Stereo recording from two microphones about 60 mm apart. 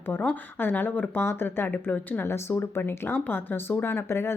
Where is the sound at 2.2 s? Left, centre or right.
Left.